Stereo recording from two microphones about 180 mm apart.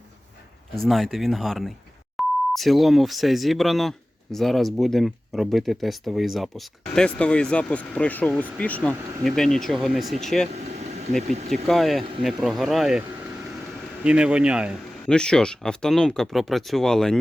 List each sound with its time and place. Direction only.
0.9 s speech: centre (ahead or behind)
10.5 s vehicle: 40° right (ahead or behind)
11.2 s speech: 40° right (ahead or behind)
11.7 s speech: centre (ahead or behind)
15.1 s speech: 5° left (ahead or behind)